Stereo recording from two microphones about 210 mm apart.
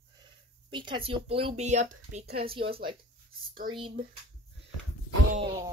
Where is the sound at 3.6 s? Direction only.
40° right (ahead or behind).